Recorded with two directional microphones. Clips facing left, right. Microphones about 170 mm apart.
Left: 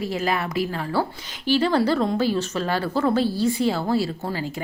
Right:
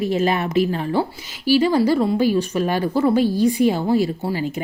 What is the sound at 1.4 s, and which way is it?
A woman's voice, 10° right (ahead or behind).